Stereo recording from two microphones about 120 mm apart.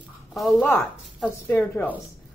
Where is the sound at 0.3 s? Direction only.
5° left (ahead or behind).